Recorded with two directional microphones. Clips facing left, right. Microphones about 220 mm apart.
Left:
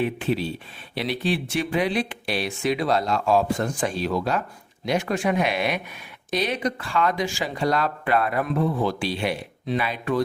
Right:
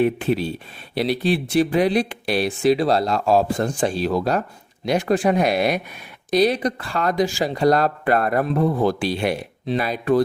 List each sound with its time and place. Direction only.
0.0 s speech: 50° right (ahead or behind)